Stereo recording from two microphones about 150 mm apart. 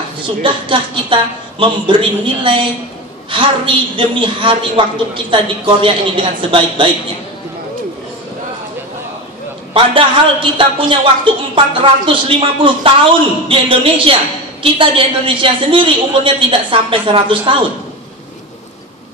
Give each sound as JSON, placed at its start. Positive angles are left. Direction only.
{"t": 0.4, "sound": "a woman's voice", "side_deg": -35}
{"t": 9.8, "sound": "a woman's voice", "side_deg": -35}